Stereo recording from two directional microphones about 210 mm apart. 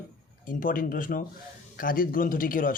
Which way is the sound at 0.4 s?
40° left (ahead or behind).